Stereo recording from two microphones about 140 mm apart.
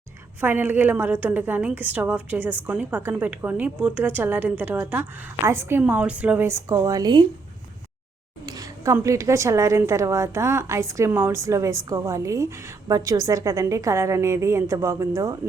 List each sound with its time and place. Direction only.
0.4 s a woman's voice: 15° right (ahead or behind); by 7.3 s 30° right (ahead or behind)
8.4 s a woman's voice: 25° right (ahead or behind)